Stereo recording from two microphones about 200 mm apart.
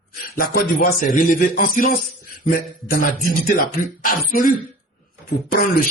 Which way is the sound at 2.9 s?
45° left (ahead or behind).